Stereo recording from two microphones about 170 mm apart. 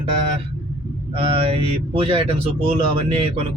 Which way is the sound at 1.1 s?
30° right (ahead or behind).